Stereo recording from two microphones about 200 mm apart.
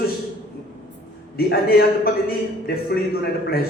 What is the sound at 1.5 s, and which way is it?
A man's voice, 50° left (ahead or behind).